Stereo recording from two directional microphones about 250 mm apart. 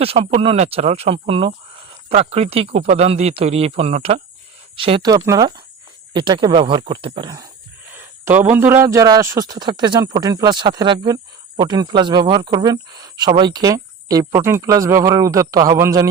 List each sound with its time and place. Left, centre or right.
0.0 s speech: right